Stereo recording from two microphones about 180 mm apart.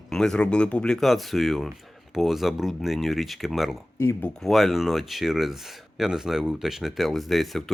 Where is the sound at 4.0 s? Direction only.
15° left (ahead or behind).